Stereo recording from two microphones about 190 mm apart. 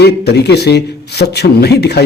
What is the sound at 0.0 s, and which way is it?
A man's voice, 60° left (ahead or behind).